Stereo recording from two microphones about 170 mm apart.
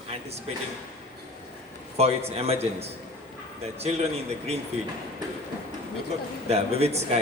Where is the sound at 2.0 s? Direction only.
35° right (ahead or behind).